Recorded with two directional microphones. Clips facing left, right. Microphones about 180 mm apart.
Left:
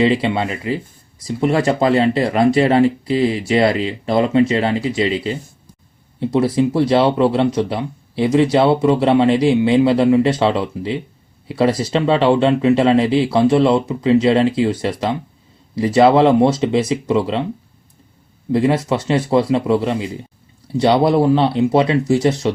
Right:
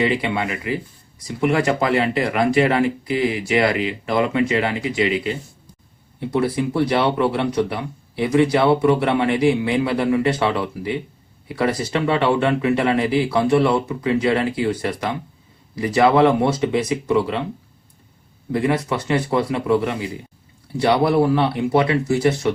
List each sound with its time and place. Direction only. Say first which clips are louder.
0.0 s speech: left 4 dB; 25° left (ahead or behind)
18.5 s speech: left 4 dB; 25° left (ahead or behind)